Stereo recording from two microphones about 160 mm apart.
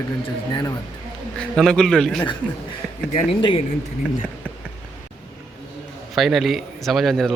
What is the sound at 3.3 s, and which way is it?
Speech, 35° left (ahead or behind).